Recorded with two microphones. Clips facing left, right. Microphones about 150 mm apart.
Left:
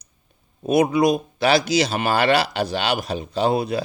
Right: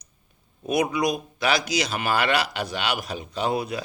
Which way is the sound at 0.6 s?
30° left (ahead or behind).